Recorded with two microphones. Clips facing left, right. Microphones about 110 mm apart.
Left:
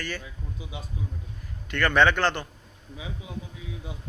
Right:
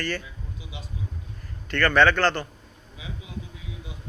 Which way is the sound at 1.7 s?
15° left (ahead or behind).